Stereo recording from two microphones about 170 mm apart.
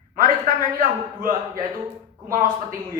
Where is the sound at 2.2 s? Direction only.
55° right (ahead or behind).